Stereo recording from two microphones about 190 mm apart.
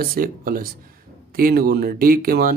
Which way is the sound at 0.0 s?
50° right (ahead or behind).